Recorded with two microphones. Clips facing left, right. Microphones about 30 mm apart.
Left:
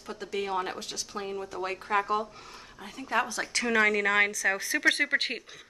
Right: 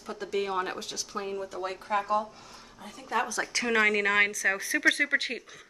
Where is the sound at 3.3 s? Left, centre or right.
Centre.